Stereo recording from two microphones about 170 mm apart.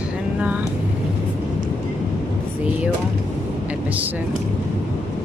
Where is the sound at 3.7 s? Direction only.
10° right (ahead or behind).